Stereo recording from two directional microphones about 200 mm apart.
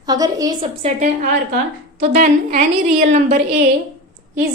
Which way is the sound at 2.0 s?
40° right (ahead or behind).